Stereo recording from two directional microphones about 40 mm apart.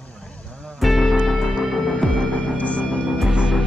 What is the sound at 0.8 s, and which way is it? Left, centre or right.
Music, centre.